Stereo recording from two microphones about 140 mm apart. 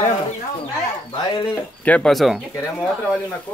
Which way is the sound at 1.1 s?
35° left (ahead or behind).